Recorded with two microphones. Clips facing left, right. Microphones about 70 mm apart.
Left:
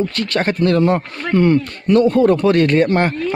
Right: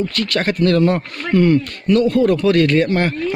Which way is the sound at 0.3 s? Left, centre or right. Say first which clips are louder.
Even; left.